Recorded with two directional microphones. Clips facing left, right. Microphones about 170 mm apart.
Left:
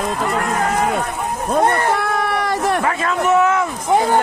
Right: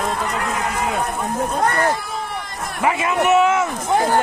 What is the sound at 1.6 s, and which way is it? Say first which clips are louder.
Speech: left 1 dB; 25° left (ahead or behind).